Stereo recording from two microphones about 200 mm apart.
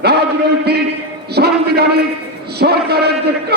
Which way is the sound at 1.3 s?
55° right (ahead or behind).